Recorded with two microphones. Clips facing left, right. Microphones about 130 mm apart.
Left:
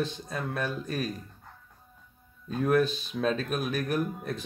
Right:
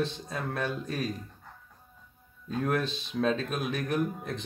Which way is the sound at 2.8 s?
25° right (ahead or behind).